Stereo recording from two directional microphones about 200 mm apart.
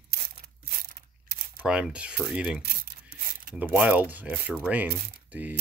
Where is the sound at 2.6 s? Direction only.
45° right (ahead or behind).